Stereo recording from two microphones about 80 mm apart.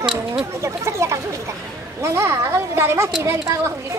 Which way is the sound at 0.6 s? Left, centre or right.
Right.